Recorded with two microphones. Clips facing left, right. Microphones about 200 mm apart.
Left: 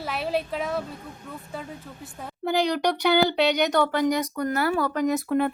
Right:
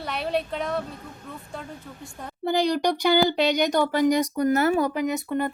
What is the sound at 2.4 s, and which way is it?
A child's voice, 15° right (ahead or behind).